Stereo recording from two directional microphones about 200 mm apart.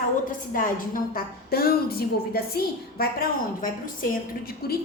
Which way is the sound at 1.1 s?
50° left (ahead or behind).